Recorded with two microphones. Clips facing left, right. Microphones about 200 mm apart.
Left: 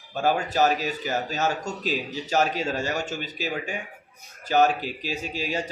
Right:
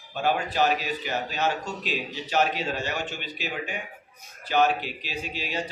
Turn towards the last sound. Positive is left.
turn(degrees=45)  # may be behind; listen again after turning